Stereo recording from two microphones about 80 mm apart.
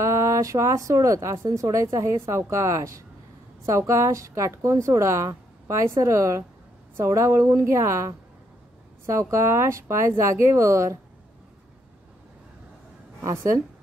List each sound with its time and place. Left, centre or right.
0.0 s speech: right
9.3 s speech: right
13.2 s speech: right